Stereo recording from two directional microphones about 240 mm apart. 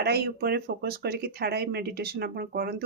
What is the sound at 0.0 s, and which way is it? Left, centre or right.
Speech, right.